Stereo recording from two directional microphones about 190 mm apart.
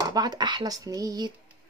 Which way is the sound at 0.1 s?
20° right (ahead or behind).